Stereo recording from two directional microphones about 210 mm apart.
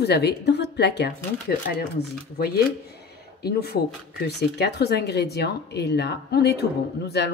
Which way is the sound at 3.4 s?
50° left (ahead or behind).